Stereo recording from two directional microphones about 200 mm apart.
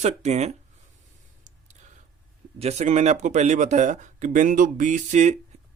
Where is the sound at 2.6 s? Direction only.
35° right (ahead or behind).